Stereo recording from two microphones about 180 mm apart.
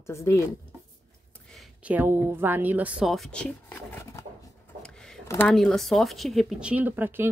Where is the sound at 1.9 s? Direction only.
10° right (ahead or behind); by 3.8 s 5° left (ahead or behind).